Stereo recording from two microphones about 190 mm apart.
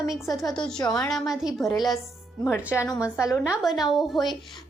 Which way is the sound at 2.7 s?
15° left (ahead or behind).